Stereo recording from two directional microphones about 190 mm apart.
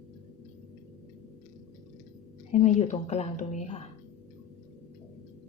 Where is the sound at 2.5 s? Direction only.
35° left (ahead or behind).